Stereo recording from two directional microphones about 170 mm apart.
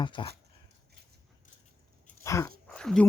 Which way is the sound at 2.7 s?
5° left (ahead or behind).